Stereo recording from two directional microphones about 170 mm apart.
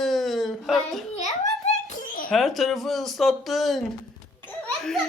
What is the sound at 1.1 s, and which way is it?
Babbling, 40° left (ahead or behind).